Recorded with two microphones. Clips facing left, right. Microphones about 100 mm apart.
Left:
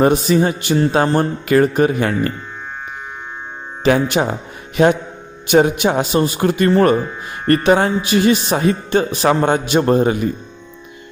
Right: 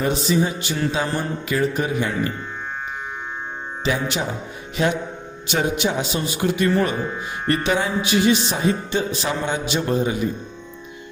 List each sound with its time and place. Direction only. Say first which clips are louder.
0.0 s music: left 7 dB; 55° left (ahead or behind)
3.8 s music: left 9 dB; 60° left (ahead or behind)
5.5 s speech: left 8 dB; 55° left (ahead or behind)